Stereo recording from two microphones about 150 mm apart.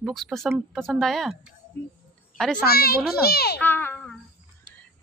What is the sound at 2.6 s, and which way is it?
A child's voice, 90° left.